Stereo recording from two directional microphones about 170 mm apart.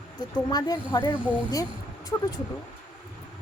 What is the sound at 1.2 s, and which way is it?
Speech, 10° right (ahead or behind).